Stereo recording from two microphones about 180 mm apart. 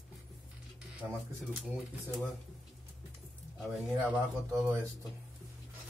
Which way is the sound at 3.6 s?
Centre (ahead or behind).